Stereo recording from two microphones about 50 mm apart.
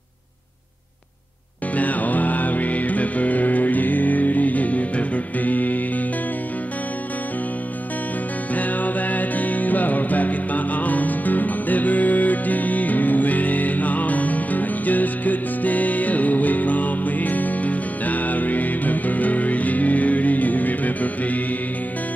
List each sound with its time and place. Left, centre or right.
1.8 s music: left
8.5 s music: left